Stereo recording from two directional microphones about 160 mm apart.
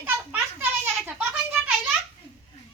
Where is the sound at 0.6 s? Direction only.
15° right (ahead or behind).